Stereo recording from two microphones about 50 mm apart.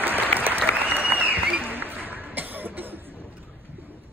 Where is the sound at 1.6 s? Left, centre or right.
Right.